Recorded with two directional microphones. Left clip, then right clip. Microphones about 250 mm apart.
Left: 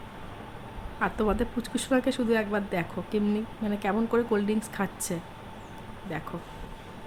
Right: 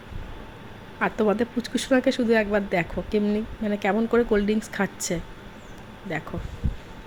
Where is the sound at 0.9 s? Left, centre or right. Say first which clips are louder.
Right 4 dB; centre.